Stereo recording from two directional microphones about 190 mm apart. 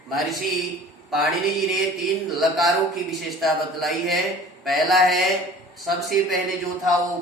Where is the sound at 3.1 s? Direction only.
Centre (ahead or behind).